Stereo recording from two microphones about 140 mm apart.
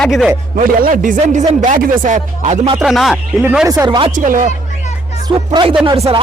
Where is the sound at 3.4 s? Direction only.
15° right (ahead or behind); by 4.1 s 30° right (ahead or behind).